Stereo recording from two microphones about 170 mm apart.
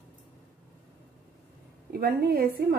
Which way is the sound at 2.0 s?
65° right (ahead or behind).